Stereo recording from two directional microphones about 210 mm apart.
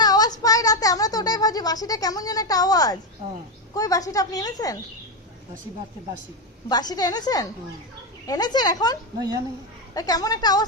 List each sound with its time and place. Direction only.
0.0 s a sound: 20° left (ahead or behind)
3.8 s speech: 15° left (ahead or behind)
6.7 s a woman's voice: 20° left (ahead or behind)
9.1 s a woman's voice: 15° right (ahead or behind)
9.9 s speech: 20° left (ahead or behind)